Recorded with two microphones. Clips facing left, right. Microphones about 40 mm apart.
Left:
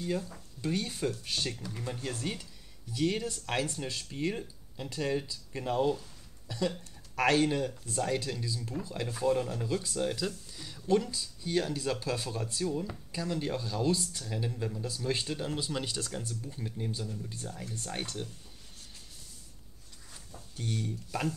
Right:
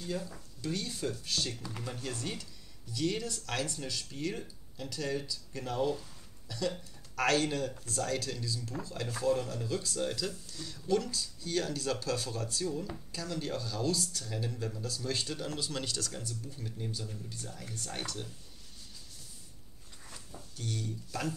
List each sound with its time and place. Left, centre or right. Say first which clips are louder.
0.6 s speech: left 4 dB; left
9.8 s speech: left 1 dB; centre
20.5 s speech: left 3 dB; left